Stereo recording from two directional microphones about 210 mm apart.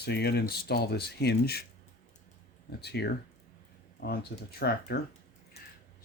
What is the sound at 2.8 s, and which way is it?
Speech, 50° left (ahead or behind).